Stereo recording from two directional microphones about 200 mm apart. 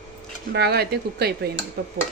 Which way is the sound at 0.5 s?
55° right (ahead or behind).